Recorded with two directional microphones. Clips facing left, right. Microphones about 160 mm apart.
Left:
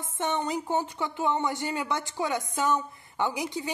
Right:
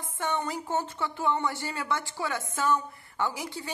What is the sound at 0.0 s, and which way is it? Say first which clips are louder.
Speech: left 2 dB; 20° left (ahead or behind).